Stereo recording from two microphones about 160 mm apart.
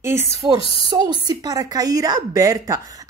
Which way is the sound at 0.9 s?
25° right (ahead or behind).